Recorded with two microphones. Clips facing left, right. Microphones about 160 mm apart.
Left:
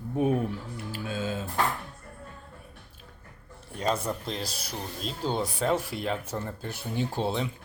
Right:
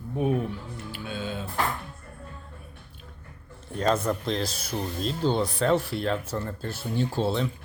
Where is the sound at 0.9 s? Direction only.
40° left (ahead or behind).